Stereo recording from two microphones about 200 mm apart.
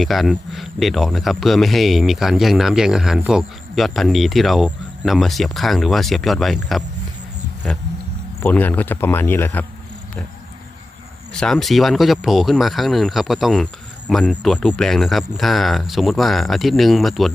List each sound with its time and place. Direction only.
0.0 s speech: centre (ahead or behind)
8.4 s speech: 10° left (ahead or behind)
11.3 s speech: centre (ahead or behind)